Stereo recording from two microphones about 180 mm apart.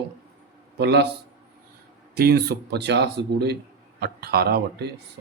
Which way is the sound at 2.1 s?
60° right (ahead or behind).